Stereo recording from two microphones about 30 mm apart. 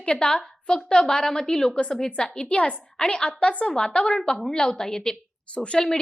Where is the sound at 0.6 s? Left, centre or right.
Left.